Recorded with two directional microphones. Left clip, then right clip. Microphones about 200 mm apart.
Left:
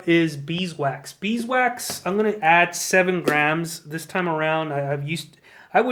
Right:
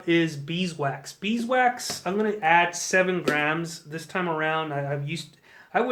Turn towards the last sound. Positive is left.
turn(degrees=45)  # may be behind; listen again after turning